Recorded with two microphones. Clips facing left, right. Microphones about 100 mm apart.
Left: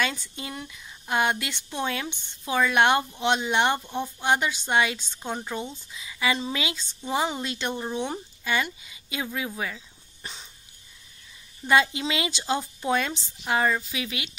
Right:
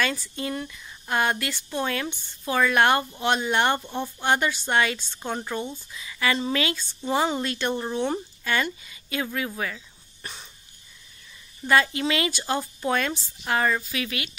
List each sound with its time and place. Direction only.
0.0 s speech: 20° left (ahead or behind)
9.6 s a sound: 15° left (ahead or behind)
11.6 s speech: 15° left (ahead or behind)